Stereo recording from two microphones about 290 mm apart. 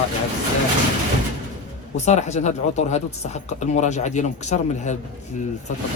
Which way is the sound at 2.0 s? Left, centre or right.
Left.